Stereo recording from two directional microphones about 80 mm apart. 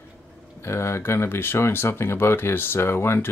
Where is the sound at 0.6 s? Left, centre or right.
Left.